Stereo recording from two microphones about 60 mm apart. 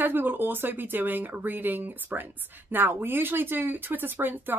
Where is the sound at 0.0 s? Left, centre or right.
Right.